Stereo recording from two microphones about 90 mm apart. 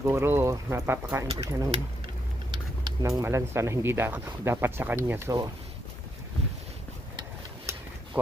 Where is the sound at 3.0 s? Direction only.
35° right (ahead or behind).